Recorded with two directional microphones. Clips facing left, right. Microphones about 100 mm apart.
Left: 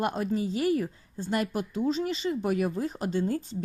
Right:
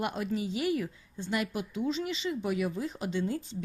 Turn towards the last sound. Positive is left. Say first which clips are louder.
# left 4 dB
turn(degrees=45)  # may be behind; listen again after turning